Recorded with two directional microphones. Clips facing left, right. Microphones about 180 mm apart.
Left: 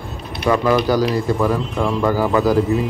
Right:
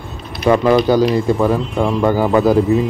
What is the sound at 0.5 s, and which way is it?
Speech, 25° right (ahead or behind).